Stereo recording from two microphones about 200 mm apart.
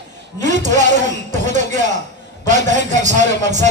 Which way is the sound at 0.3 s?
35° right (ahead or behind).